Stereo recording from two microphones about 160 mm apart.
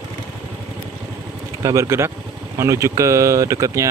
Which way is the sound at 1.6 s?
20° right (ahead or behind).